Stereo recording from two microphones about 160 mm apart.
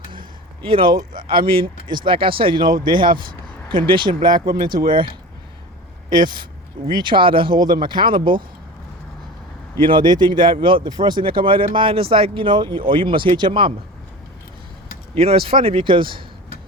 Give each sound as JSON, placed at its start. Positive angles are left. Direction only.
{"t": 0.1, "sound": "a sound", "side_deg": -35}
{"t": 1.5, "sound": "speech", "side_deg": -30}
{"t": 6.2, "sound": "speech", "side_deg": -30}
{"t": 9.8, "sound": "speech", "side_deg": -30}
{"t": 15.1, "sound": "speech", "side_deg": -35}